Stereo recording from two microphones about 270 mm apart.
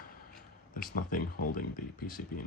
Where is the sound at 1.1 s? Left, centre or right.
Left.